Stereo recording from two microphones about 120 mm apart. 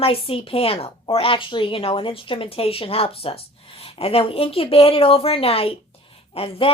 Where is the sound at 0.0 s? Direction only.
50° left (ahead or behind).